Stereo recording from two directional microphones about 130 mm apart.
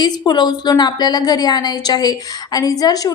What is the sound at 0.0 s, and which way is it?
A woman's voice, 35° left (ahead or behind).